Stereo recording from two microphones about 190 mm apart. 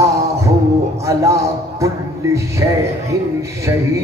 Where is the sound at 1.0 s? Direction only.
15° right (ahead or behind).